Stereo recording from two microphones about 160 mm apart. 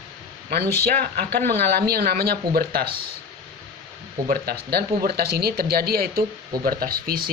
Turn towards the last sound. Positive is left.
turn(degrees=-65)  # may be behind; listen again after turning